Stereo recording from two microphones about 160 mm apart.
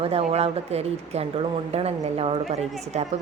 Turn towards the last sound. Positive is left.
turn(degrees=-45)  # may be behind; listen again after turning